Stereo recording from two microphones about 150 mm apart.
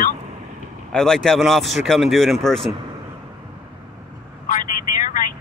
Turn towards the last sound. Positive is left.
turn(degrees=60)  # may be behind; listen again after turning